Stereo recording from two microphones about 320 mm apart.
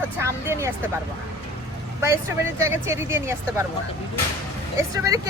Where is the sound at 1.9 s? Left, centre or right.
Centre.